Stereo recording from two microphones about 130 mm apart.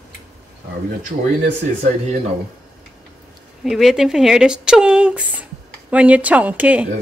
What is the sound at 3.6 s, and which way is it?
A woman's voice, centre (ahead or behind).